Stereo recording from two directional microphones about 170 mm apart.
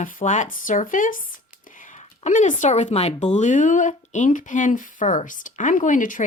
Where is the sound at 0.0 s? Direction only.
50° left (ahead or behind).